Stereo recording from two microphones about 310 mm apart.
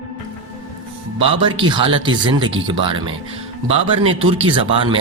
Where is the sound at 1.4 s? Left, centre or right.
Centre.